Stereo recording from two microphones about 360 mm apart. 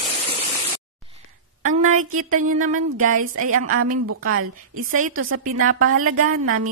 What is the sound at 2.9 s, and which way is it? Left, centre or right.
Speech, right.